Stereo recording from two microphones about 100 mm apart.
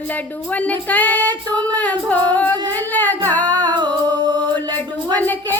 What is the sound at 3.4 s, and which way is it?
Music, 45° right (ahead or behind).